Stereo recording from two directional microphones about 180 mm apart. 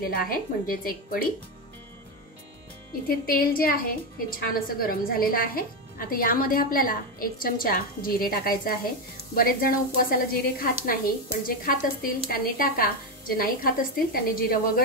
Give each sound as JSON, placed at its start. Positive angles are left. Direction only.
{"t": 0.0, "sound": "a woman's voice", "side_deg": 55}
{"t": 3.1, "sound": "a woman's voice", "side_deg": 55}